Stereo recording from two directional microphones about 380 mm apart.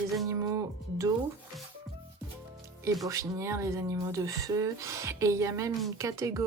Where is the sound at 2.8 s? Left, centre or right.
Centre.